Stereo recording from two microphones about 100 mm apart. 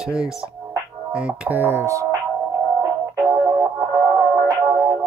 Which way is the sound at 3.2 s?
30° right (ahead or behind).